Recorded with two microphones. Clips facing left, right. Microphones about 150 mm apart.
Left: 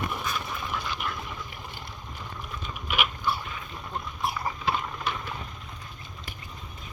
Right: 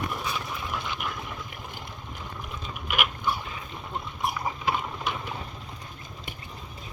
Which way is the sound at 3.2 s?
15° right (ahead or behind).